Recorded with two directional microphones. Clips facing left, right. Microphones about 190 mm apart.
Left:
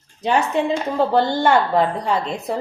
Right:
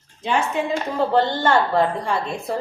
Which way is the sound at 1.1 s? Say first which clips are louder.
Left 1 dB; 15° left (ahead or behind).